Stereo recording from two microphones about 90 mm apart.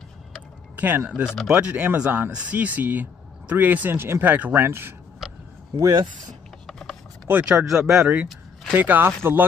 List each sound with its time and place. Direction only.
0.7 s speech: 20° right (ahead or behind)
5.2 s a sound: 5° right (ahead or behind)
6.7 s mechanisms: 5° left (ahead or behind)
7.2 s speech: 20° right (ahead or behind)
7.5 s speech: 5° right (ahead or behind)
8.7 s speech: 20° right (ahead or behind)